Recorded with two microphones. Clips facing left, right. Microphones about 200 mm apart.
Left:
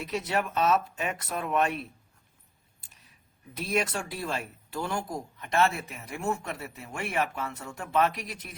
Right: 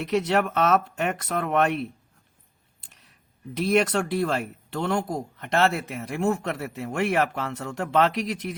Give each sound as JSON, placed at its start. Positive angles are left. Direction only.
{"t": 0.1, "sound": "speech", "side_deg": -75}
{"t": 3.6, "sound": "speech", "side_deg": -75}